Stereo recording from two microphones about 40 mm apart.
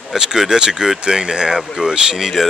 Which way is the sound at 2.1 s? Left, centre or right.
Centre.